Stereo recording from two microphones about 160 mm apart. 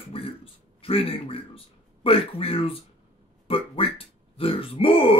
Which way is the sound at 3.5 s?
35° left (ahead or behind).